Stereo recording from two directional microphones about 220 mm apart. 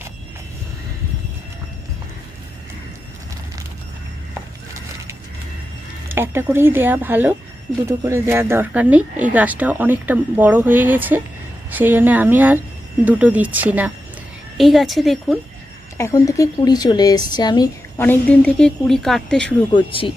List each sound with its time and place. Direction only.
6.1 s speech: 10° right (ahead or behind)
16.0 s speech: 15° left (ahead or behind)
19.7 s speech: 25° left (ahead or behind)